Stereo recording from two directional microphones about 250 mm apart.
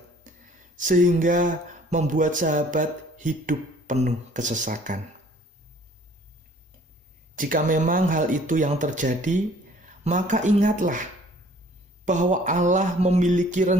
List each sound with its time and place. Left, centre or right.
0.3 s a sound: right
0.8 s speech: right
7.3 s speech: right
12.0 s mantra: right